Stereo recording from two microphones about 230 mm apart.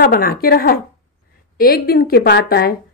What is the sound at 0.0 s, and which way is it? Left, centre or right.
A woman's voice, left.